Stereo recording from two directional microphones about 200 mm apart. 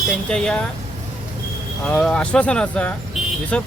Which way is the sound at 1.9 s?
5° left (ahead or behind).